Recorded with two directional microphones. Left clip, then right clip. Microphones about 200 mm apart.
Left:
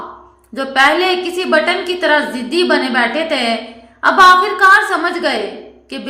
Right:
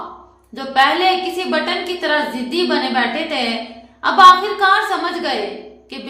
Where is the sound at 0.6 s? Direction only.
20° left (ahead or behind).